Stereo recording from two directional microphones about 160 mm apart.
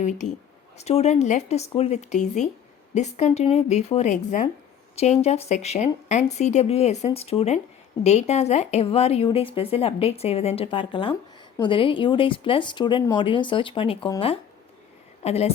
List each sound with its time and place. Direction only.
0.8 s speech: 40° left (ahead or behind)
15.2 s speech: 40° left (ahead or behind)